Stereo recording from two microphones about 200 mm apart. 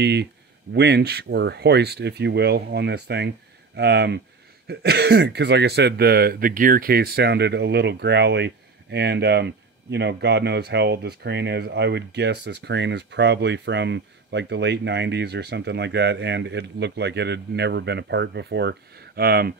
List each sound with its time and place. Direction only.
0.0 s speech: 55° right (ahead or behind)